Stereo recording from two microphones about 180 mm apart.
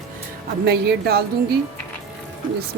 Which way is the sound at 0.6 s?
65° right (ahead or behind).